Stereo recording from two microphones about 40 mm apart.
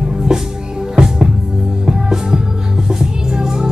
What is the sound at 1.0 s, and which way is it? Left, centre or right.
Music, right.